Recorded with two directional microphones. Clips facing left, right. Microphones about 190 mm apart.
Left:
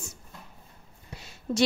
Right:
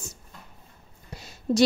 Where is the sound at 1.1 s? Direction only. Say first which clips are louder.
Right 6 dB; 40° right (ahead or behind).